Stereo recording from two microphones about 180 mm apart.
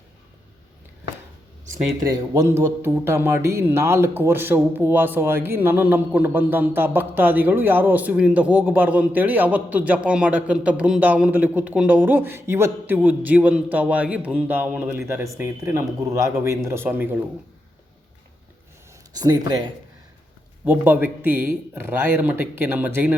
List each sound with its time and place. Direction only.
1.7 s speech: 20° right (ahead or behind)
19.1 s speech: 20° right (ahead or behind)
20.7 s speech: 10° right (ahead or behind)